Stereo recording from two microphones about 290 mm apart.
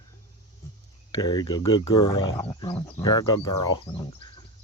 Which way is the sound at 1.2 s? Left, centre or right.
Centre.